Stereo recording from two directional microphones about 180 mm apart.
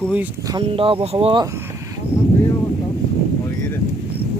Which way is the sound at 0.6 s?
30° right (ahead or behind).